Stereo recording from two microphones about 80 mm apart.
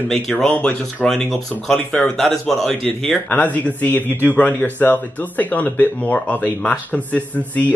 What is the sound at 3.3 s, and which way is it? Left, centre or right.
Speech, centre.